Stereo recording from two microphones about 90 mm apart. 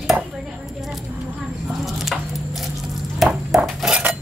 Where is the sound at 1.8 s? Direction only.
Centre (ahead or behind).